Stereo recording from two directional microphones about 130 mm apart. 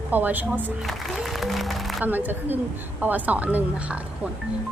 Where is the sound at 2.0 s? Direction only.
15° right (ahead or behind).